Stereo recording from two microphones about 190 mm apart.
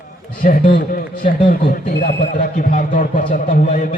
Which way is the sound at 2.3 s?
45° left (ahead or behind).